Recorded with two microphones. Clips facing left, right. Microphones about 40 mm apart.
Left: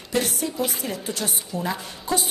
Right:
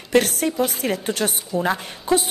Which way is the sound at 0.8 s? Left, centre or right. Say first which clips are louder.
Right 6 dB; right.